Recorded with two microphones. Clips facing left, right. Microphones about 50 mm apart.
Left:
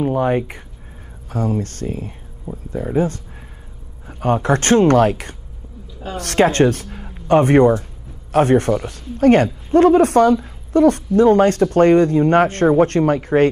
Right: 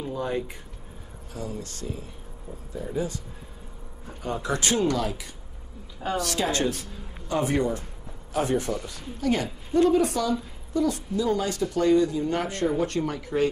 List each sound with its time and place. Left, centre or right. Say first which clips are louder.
0.0 s speech: left 11 dB; left
4.2 s speech: left 11 dB; left